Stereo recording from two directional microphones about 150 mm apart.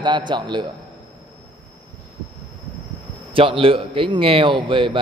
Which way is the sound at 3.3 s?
35° right (ahead or behind).